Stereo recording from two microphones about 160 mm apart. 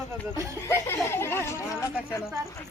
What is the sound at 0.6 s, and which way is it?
Speech, 15° left (ahead or behind).